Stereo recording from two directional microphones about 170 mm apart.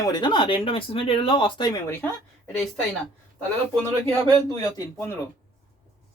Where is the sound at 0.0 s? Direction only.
25° left (ahead or behind).